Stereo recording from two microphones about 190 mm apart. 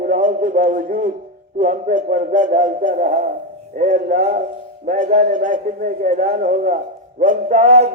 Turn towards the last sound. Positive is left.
turn(degrees=-40)  # may be behind; listen again after turning